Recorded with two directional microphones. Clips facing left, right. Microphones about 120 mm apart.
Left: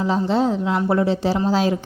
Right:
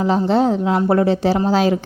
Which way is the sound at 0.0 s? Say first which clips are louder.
Right 3 dB; 65° right (ahead or behind).